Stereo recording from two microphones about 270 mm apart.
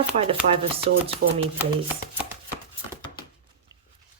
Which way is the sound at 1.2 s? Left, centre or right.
Right.